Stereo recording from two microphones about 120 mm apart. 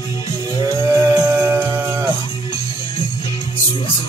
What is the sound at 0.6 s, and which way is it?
Music, 30° right (ahead or behind).